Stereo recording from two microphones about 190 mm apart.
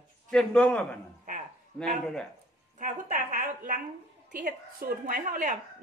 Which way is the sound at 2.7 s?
40° right (ahead or behind).